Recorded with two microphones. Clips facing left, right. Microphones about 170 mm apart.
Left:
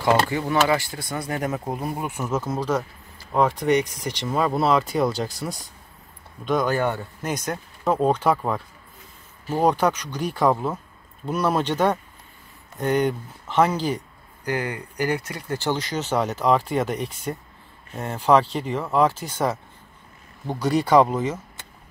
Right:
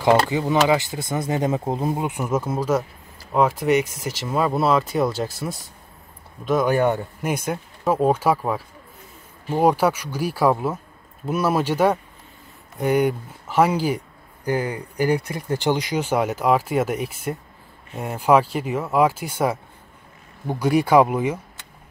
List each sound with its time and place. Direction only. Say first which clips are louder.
0.3 s speech: right 2 dB; 20° right (ahead or behind)
6.7 s speech: right 4 dB; 15° right (ahead or behind)
15.2 s speech: right 4 dB; 15° right (ahead or behind)